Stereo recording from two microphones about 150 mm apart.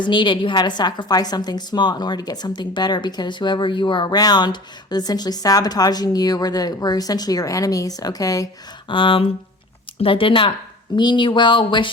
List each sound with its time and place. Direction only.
0.0 s a woman's voice: 30° left (ahead or behind)
8.9 s speech: 35° left (ahead or behind)